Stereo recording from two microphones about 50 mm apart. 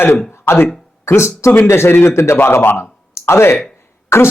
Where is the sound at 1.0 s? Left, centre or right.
Left.